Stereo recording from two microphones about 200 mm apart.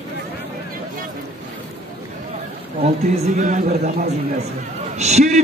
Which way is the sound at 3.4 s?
40° right (ahead or behind).